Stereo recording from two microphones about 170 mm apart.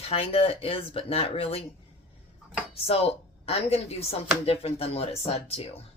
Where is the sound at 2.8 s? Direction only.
35° left (ahead or behind).